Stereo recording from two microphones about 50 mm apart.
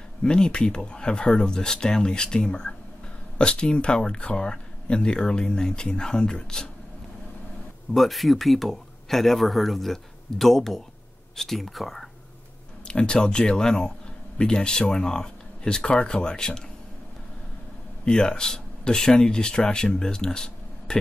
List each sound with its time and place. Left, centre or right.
0.2 s speech: centre
7.9 s speech: centre
12.8 s speech: centre
18.0 s speech: centre